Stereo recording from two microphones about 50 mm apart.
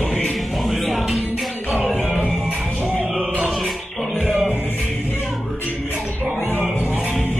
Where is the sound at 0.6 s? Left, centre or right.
Centre.